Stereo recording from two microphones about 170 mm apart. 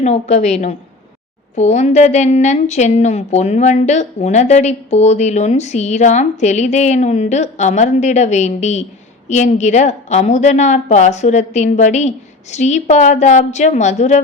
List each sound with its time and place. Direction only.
0.0 s a woman's voice: 40° left (ahead or behind)